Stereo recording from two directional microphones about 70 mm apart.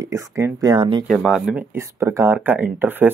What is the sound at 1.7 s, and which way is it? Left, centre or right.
Speech, right.